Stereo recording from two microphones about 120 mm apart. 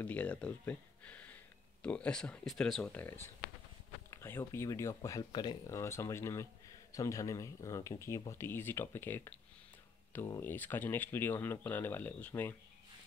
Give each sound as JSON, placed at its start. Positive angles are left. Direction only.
{"t": 0.0, "sound": "speech", "side_deg": 10}
{"t": 5.3, "sound": "speech", "side_deg": 35}
{"t": 5.7, "sound": "speech", "side_deg": 25}
{"t": 10.4, "sound": "speech", "side_deg": 15}